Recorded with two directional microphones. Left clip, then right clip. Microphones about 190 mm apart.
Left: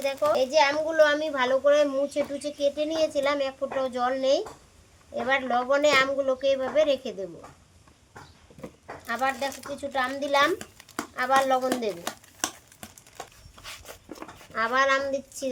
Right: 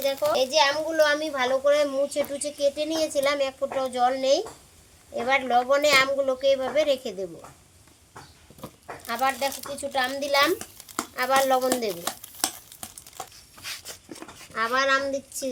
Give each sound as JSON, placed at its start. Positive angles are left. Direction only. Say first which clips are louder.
{"t": 0.3, "sound": "a child's voice", "louder": "even", "side_deg": 5}
{"t": 8.6, "sound": "a sound", "louder": "even", "side_deg": -10}
{"t": 9.9, "sound": "a woman's voice", "louder": "right 1 dB", "side_deg": -10}
{"t": 12.0, "sound": "crumpling", "louder": "right 2 dB", "side_deg": 15}
{"t": 13.7, "sound": "a sound", "louder": "right 4 dB", "side_deg": 5}
{"t": 14.5, "sound": "a child's voice", "louder": "even", "side_deg": -5}